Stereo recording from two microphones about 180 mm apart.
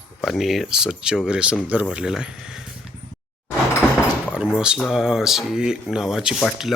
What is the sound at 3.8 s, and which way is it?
Door, 15° left (ahead or behind).